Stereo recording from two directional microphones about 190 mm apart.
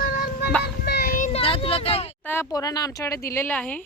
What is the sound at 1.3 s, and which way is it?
Speech, 30° left (ahead or behind).